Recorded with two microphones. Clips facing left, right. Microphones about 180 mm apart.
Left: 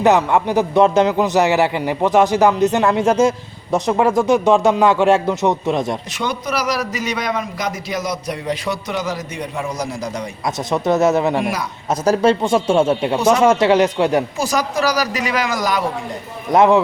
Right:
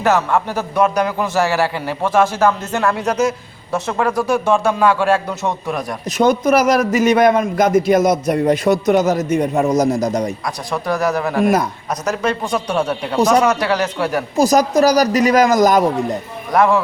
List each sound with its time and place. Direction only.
0.0 s a man's voice: 20° left (ahead or behind)
6.1 s a man's voice: 45° right (ahead or behind)
10.7 s a man's voice: 20° left (ahead or behind)
14.3 s a man's voice: 40° right (ahead or behind)
16.5 s a man's voice: 20° left (ahead or behind)